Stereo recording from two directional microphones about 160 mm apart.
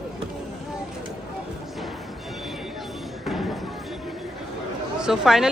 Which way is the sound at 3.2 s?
Centre (ahead or behind).